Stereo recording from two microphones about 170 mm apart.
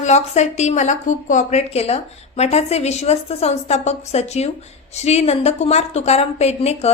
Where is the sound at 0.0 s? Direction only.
40° left (ahead or behind).